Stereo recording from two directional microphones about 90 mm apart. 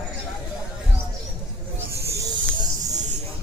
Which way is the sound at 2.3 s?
50° right (ahead or behind).